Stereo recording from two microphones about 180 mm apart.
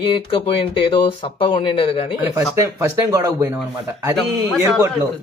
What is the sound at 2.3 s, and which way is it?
Speech, 15° right (ahead or behind).